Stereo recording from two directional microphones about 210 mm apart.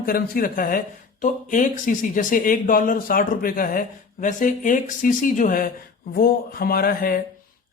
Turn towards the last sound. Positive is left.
turn(degrees=45)  # may be behind; listen again after turning